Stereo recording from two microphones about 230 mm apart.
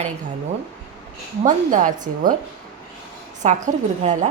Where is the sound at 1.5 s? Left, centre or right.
Right.